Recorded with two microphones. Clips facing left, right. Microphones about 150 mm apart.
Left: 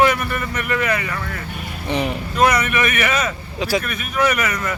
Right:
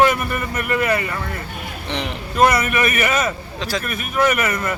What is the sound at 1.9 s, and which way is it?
Speech, 10° left (ahead or behind).